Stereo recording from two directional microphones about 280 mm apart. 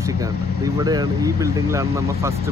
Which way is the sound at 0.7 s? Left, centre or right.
Centre.